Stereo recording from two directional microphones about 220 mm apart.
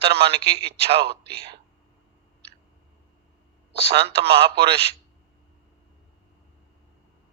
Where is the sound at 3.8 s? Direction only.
25° right (ahead or behind).